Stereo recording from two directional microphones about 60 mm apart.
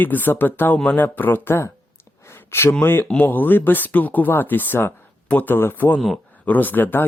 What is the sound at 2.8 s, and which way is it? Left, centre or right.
Speech, left.